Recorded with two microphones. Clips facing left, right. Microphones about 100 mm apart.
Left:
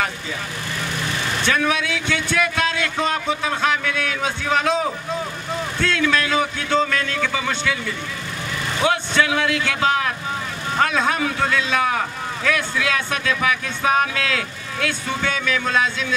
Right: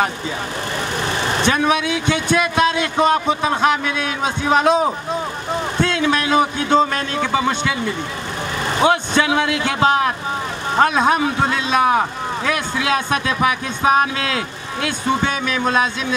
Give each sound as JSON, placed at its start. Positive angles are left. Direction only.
{"t": 1.0, "sound": "vehicle", "side_deg": -35}
{"t": 1.4, "sound": "speech", "side_deg": -20}
{"t": 5.8, "sound": "a sound", "side_deg": -20}
{"t": 8.8, "sound": "speech", "side_deg": -25}